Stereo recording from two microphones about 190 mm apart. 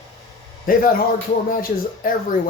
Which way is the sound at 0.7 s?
50° left (ahead or behind).